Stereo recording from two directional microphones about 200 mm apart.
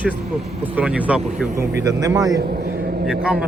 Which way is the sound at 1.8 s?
15° right (ahead or behind).